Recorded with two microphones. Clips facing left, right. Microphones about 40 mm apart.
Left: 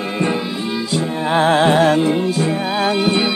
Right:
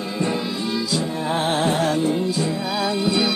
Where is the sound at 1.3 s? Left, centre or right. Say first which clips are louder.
Left 8 dB; left.